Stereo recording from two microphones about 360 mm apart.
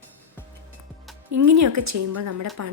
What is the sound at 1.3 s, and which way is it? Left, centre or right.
Speech, right.